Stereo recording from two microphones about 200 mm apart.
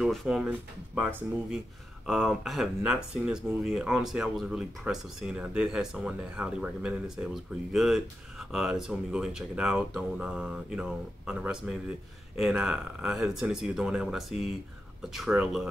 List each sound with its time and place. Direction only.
0.0 s speech: centre (ahead or behind)
2.0 s speech: centre (ahead or behind)